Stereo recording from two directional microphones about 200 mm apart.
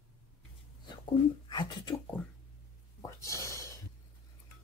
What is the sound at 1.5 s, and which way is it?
Speech, 20° left (ahead or behind).